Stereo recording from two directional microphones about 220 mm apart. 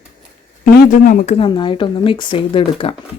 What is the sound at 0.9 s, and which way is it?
Speech, 35° left (ahead or behind).